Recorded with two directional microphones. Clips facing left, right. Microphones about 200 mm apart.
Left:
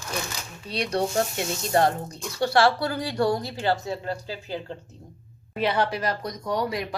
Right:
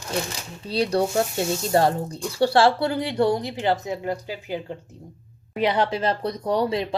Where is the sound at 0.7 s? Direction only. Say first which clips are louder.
Right 4 dB; 30° right (ahead or behind).